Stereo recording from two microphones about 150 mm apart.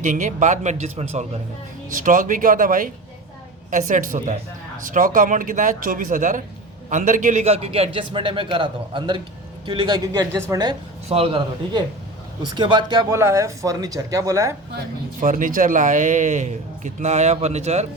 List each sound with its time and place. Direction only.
0.0 s a man's voice: 55° right (ahead or behind)
1.9 s a man's voice: 60° right (ahead or behind); by 10.8 s 25° right (ahead or behind)
11.1 s a man's voice: 40° right (ahead or behind); by 14.5 s 20° right (ahead or behind)
15.2 s a man's voice: 60° right (ahead or behind)